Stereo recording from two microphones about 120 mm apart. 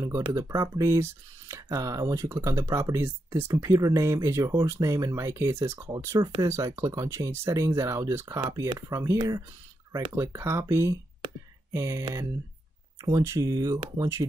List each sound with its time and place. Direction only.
0.3 s speech: 25° right (ahead or behind)